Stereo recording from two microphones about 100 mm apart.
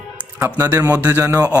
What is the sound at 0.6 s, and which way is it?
Speech, 35° right (ahead or behind).